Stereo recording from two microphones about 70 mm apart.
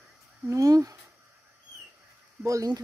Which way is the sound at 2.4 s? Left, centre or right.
Right.